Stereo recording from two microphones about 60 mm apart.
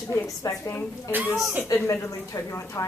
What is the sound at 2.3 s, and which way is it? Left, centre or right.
Speech, left.